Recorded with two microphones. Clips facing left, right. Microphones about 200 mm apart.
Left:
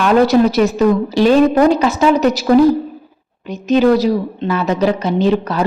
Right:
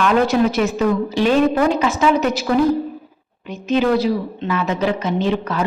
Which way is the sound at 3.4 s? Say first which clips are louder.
Left 5 dB; 40° left (ahead or behind).